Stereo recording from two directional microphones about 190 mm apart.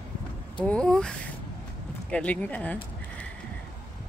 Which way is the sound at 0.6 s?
5° left (ahead or behind).